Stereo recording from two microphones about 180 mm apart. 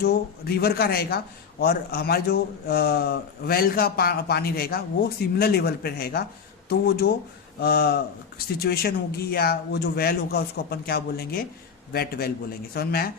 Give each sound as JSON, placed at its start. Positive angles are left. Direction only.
{"t": 0.0, "sound": "a man's voice", "side_deg": 60}